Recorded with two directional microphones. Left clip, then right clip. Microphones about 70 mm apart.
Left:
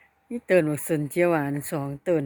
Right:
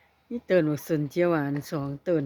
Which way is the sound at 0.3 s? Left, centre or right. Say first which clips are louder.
Left 2 dB; centre.